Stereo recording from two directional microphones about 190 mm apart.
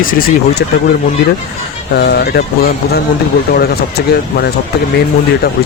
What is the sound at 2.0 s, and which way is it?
Speech, 55° left (ahead or behind).